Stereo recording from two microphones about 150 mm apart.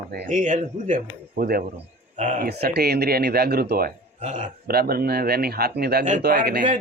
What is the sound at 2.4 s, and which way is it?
Speech, 90° right.